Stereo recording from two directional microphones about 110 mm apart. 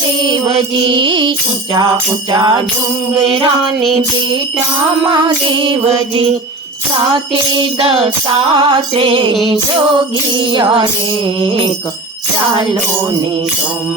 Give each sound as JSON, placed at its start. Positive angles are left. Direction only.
{"t": 0.5, "sound": "music", "side_deg": -50}
{"t": 3.6, "sound": "music", "side_deg": 0}
{"t": 5.0, "sound": "music", "side_deg": -45}
{"t": 7.1, "sound": "music", "side_deg": -40}
{"t": 10.3, "sound": "music", "side_deg": -45}